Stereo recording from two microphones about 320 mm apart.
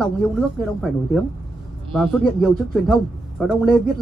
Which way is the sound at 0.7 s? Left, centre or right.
Centre.